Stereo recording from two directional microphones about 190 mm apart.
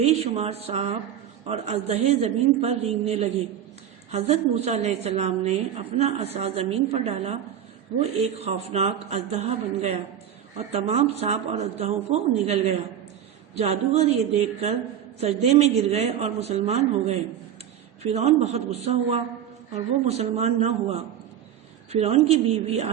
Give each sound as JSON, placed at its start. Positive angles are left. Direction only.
{"t": 0.0, "sound": "a woman's voice", "side_deg": -35}